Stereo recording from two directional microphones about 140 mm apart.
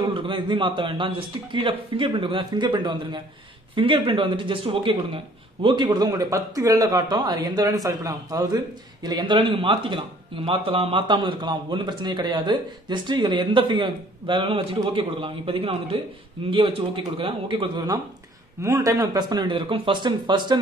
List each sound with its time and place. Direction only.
0.1 s speech: 35° right (ahead or behind)
18.6 s speech: 20° right (ahead or behind)